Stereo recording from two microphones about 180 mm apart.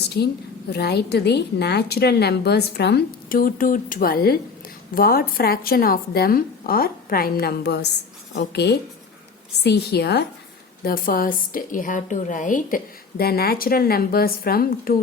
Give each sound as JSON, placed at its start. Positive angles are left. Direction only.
{"t": 0.2, "sound": "a woman's voice", "side_deg": 65}
{"t": 10.8, "sound": "a woman's voice", "side_deg": 50}